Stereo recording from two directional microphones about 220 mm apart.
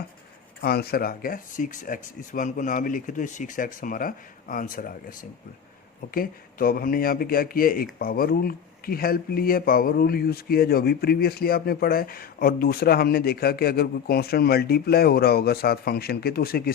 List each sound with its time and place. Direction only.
0.6 s speech: 45° left (ahead or behind)
6.1 s speech: 40° left (ahead or behind)